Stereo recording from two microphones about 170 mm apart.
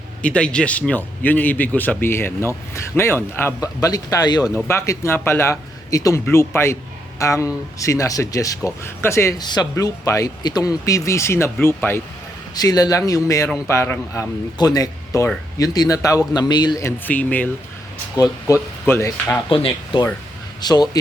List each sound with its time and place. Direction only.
0.2 s a man's voice: 5° left (ahead or behind)
12.5 s a man's voice: 20° left (ahead or behind)
17.1 s a man's voice: 10° left (ahead or behind)
19.6 s speech: 30° left (ahead or behind)